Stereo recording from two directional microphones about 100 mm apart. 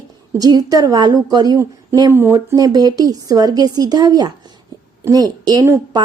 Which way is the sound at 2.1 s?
25° right (ahead or behind).